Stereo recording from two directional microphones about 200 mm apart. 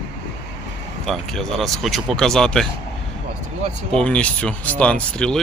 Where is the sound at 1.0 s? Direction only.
Centre (ahead or behind).